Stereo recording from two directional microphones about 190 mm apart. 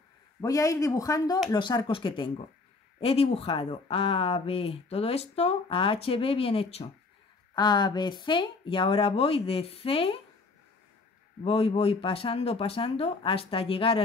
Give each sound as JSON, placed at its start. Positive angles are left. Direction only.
{"t": 0.4, "sound": "speech", "side_deg": 15}
{"t": 11.4, "sound": "speech", "side_deg": 30}